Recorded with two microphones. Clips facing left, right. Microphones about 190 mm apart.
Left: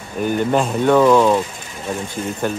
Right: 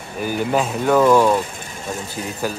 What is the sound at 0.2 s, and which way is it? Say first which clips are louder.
Speech: left 3 dB; 5° right (ahead or behind).